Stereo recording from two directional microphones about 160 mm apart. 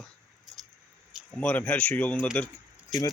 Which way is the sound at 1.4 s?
10° left (ahead or behind).